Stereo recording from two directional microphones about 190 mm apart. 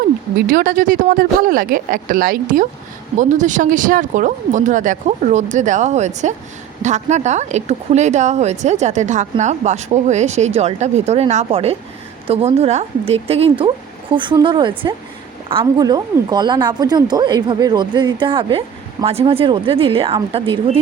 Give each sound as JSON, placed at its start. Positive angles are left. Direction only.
{"t": 0.3, "sound": "speech", "side_deg": -50}